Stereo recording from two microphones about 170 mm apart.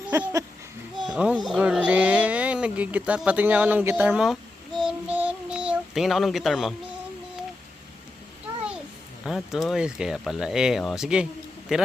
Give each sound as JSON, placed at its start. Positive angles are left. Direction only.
{"t": 0.1, "sound": "speech", "side_deg": -15}
{"t": 0.9, "sound": "a sound", "side_deg": -5}
{"t": 4.9, "sound": "child singing", "side_deg": -10}
{"t": 9.2, "sound": "speech", "side_deg": 0}